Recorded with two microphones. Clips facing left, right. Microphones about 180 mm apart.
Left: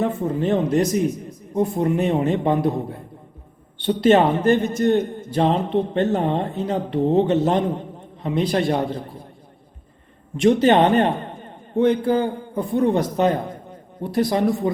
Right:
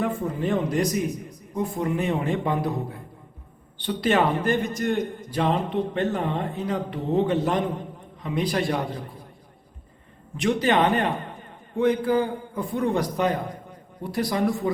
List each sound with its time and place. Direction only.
0.0 s a man's voice: 25° left (ahead or behind)
3.8 s a man's voice: 25° left (ahead or behind)
10.4 s a man's voice: 25° left (ahead or behind)